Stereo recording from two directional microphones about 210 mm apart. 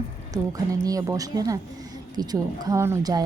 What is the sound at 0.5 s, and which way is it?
A woman's voice, 15° right (ahead or behind).